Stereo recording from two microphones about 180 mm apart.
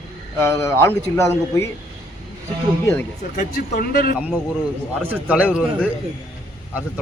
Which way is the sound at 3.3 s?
50° left (ahead or behind).